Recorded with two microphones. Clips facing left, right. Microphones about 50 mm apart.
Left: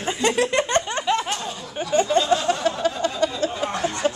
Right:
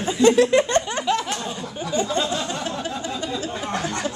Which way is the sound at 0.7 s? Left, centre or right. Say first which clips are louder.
Even; centre.